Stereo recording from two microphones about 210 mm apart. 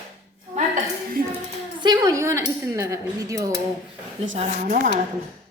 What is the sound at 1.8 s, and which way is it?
Speech, 20° right (ahead or behind).